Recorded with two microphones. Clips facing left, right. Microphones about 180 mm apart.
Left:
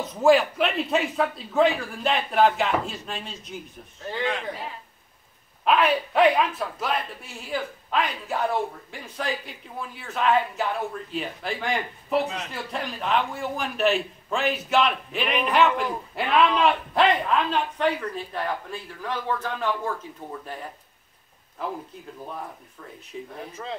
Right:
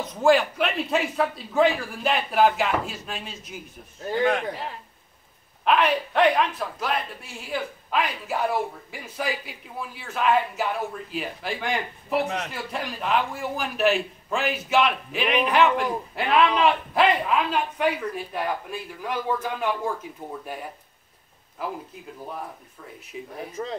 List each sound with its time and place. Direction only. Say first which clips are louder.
0.0 s a man's voice: left 1 dB; 5° left (ahead or behind)
4.1 s speech: right 6 dB; 45° right (ahead or behind)
5.7 s a man's voice: even; centre (ahead or behind)